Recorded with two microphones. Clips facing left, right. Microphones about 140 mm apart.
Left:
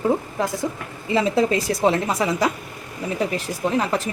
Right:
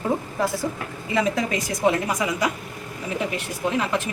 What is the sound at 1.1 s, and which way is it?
A woman's voice, 30° left (ahead or behind).